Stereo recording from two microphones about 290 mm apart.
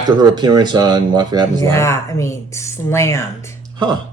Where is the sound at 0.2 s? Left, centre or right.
Centre.